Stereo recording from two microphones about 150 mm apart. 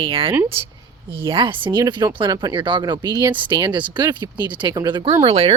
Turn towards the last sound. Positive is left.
turn(degrees=-45)  # may be behind; listen again after turning